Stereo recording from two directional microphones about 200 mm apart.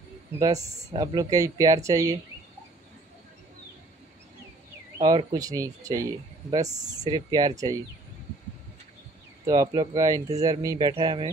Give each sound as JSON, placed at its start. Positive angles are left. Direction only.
{"t": 0.6, "sound": "speech", "side_deg": -35}
{"t": 0.9, "sound": "speech", "side_deg": -20}
{"t": 4.9, "sound": "speech", "side_deg": -20}
{"t": 9.5, "sound": "speech", "side_deg": -20}